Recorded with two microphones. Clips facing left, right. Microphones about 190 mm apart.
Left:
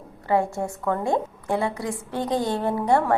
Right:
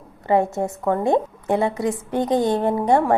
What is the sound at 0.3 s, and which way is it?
A woman's voice, 20° right (ahead or behind).